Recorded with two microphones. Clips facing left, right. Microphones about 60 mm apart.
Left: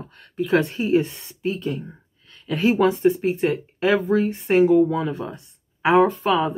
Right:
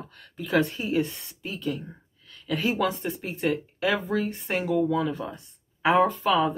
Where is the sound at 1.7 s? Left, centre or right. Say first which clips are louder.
Left 5 dB; centre.